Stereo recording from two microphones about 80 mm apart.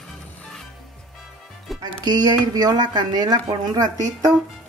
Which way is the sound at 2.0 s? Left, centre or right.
Right.